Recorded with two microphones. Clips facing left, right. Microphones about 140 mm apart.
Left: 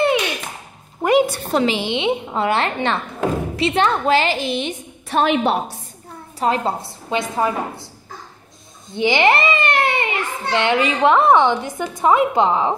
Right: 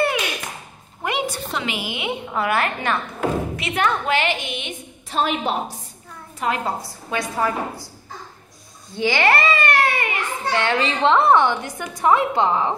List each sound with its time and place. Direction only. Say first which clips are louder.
1.2 s a sound: left 4 dB; 60° left (ahead or behind)
1.5 s a woman's voice: left 8 dB; 35° left (ahead or behind)
5.1 s a woman's voice: left 5 dB; 70° left (ahead or behind)
6.4 s a woman's voice: left 4 dB; 30° left (ahead or behind)
8.9 s a child's voice: left 3 dB; 20° left (ahead or behind)